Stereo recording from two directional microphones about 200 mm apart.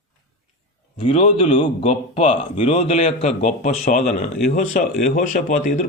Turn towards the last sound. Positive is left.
turn(degrees=35)  # may be behind; listen again after turning